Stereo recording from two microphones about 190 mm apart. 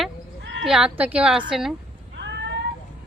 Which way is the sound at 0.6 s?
5° right (ahead or behind).